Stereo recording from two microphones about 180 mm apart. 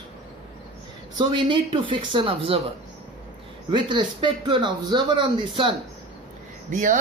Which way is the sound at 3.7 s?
25° right (ahead or behind).